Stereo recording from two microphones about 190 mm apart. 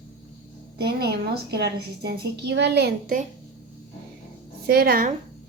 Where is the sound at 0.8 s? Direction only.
60° right (ahead or behind).